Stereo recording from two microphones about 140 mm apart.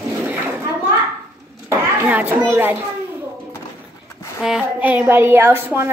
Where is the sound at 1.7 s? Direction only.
15° right (ahead or behind).